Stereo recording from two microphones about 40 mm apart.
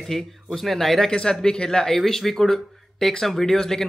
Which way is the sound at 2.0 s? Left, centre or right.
Centre.